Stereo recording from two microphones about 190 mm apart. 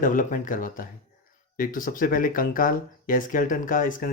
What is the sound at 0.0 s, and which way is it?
Speech, 45° left (ahead or behind).